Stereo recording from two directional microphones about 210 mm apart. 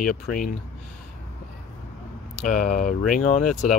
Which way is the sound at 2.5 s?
35° left (ahead or behind).